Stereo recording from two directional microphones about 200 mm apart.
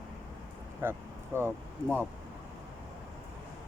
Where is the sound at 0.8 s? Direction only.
10° right (ahead or behind).